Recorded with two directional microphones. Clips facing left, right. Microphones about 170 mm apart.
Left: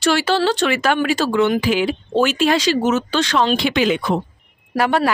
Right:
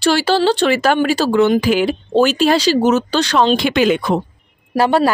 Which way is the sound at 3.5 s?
45° right (ahead or behind).